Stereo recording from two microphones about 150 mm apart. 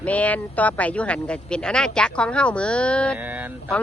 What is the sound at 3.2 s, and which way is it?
Mantra, 10° right (ahead or behind).